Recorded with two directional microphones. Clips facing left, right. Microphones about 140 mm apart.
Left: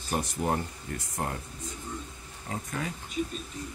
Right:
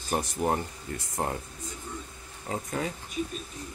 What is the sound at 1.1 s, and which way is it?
Speech, 25° right (ahead or behind).